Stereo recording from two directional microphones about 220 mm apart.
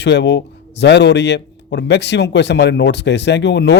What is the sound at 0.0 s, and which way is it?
A man's voice, 50° left (ahead or behind).